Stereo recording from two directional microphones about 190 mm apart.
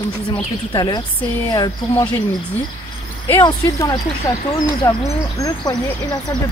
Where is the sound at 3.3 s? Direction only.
15° left (ahead or behind).